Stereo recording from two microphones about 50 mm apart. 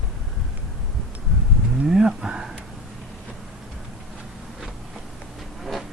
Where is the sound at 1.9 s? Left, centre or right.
Centre.